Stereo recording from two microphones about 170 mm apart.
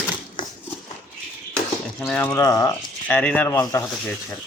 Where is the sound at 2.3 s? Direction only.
20° left (ahead or behind).